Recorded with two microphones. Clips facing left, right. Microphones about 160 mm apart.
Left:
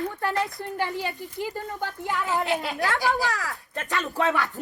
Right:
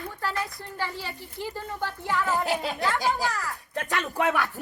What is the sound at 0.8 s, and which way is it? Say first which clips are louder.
Speech: left 4 dB; 20° left (ahead or behind).